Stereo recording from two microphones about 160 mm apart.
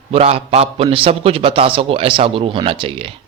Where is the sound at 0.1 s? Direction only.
40° right (ahead or behind).